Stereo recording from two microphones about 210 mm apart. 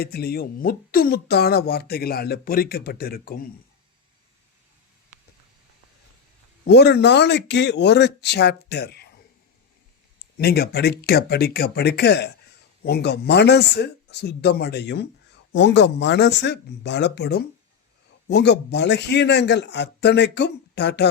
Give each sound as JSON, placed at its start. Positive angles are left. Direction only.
{"t": 0.0, "sound": "speech", "side_deg": 50}
{"t": 6.7, "sound": "speech", "side_deg": 50}
{"t": 10.3, "sound": "a man's voice", "side_deg": 45}